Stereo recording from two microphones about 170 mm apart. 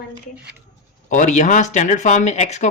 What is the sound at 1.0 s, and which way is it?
Speech, 45° left (ahead or behind).